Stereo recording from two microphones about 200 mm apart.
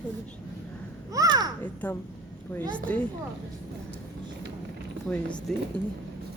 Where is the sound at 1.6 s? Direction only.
10° left (ahead or behind).